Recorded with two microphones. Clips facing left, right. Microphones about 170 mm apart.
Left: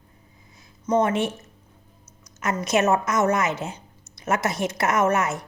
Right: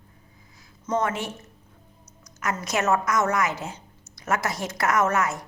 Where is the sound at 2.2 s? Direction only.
25° left (ahead or behind).